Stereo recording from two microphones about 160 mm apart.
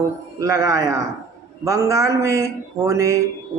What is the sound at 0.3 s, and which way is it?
Speech, 20° right (ahead or behind).